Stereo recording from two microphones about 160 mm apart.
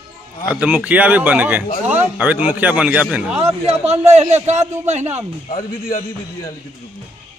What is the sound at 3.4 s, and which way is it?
Speech, 40° right (ahead or behind).